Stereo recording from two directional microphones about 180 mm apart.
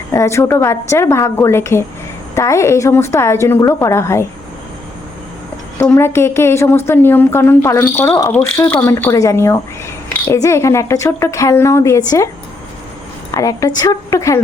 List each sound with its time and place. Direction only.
0.1 s a woman's voice: 15° left (ahead or behind)
5.7 s a woman's voice: 15° left (ahead or behind)
13.3 s a woman's voice: 20° left (ahead or behind)